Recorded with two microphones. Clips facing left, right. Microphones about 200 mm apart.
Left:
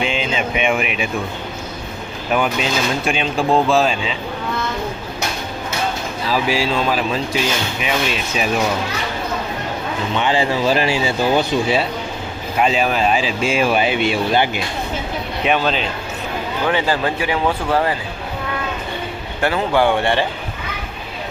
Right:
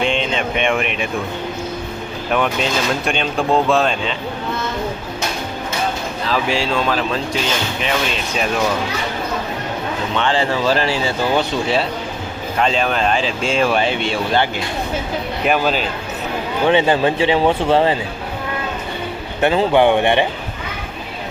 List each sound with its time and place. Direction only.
0.0 s speech: 5° left (ahead or behind)
2.3 s speech: 5° left (ahead or behind)
6.2 s speech: 10° left (ahead or behind)
10.2 s speech: 10° left (ahead or behind)
15.4 s speech: 5° right (ahead or behind)
16.6 s speech: 25° right (ahead or behind)
19.4 s speech: 20° right (ahead or behind)